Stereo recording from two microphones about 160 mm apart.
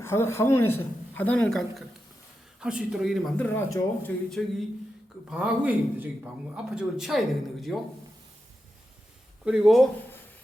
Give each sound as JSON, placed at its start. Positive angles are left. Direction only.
{"t": 0.0, "sound": "a man's voice", "side_deg": 15}
{"t": 4.4, "sound": "a man's voice", "side_deg": 5}
{"t": 9.4, "sound": "a man's voice", "side_deg": -5}